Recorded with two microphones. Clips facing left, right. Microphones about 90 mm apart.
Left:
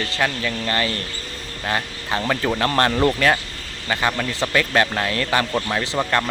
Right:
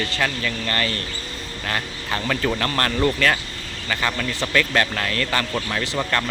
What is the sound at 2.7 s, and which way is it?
Speech, 25° left (ahead or behind).